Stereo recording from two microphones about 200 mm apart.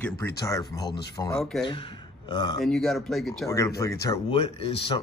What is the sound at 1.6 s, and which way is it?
Speech, 25° left (ahead or behind).